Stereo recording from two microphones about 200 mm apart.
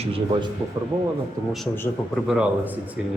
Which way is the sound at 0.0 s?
30° right (ahead or behind).